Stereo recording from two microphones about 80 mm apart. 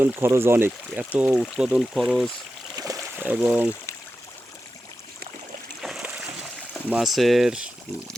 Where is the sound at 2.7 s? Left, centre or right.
Right.